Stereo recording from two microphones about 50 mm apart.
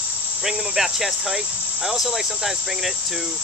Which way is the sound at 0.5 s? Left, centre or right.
Centre.